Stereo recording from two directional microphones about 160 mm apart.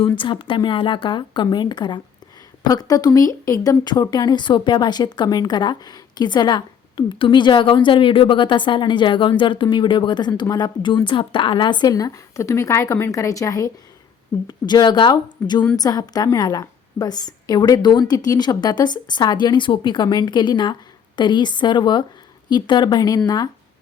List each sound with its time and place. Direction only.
0.2 s speech: 30° left (ahead or behind)